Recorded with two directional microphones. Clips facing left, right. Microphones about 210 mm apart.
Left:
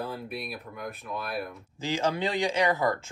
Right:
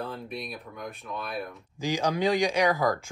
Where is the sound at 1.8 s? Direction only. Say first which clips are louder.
Right 1 dB; 15° right (ahead or behind).